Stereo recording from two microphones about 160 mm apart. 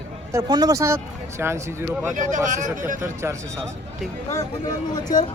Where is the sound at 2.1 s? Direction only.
55° right (ahead or behind).